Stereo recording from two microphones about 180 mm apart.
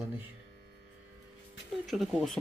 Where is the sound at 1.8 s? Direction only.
Centre (ahead or behind).